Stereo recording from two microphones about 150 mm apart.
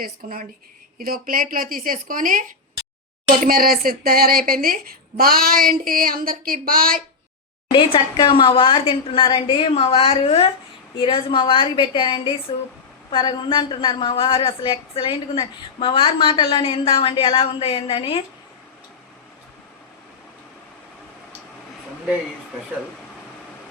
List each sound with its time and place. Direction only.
0.0 s a woman's voice: 70° right (ahead or behind)
3.4 s a woman's voice: 75° right (ahead or behind)
7.7 s a woman's voice: 35° left (ahead or behind)